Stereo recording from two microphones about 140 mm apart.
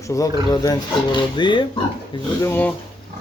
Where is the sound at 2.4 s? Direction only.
15° left (ahead or behind).